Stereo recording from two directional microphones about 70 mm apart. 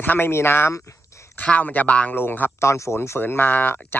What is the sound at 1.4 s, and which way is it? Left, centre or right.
Speech, centre.